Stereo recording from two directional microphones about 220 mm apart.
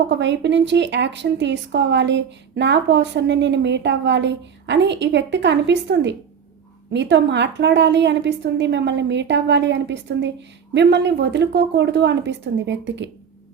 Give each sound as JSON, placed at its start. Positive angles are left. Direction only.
{"t": 0.1, "sound": "a woman's voice", "side_deg": -50}